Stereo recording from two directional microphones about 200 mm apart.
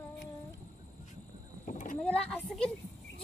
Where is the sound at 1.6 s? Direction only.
40° left (ahead or behind).